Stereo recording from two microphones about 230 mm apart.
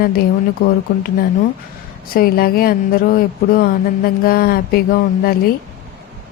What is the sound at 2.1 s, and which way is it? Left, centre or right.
Speech, left.